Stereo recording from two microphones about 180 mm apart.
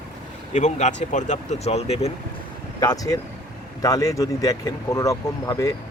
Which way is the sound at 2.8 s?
20° left (ahead or behind).